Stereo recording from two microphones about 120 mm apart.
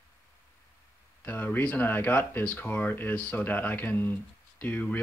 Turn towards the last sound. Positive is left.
turn(degrees=15)  # may be behind; listen again after turning